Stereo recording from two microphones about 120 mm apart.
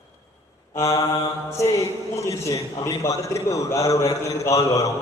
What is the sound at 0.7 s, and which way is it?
A man's voice, 25° left (ahead or behind).